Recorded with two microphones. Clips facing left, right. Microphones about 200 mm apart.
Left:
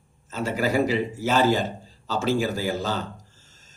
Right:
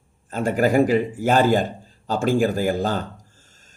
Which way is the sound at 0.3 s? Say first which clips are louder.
Right 5 dB; 50° right (ahead or behind).